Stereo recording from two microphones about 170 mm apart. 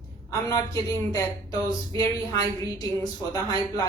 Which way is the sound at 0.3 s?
20° left (ahead or behind).